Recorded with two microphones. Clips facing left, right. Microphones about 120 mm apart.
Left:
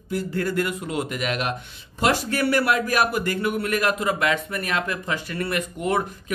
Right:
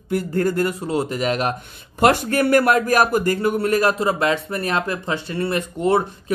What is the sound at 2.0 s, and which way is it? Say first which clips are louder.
A man's voice: right 5 dB; 55° right (ahead or behind).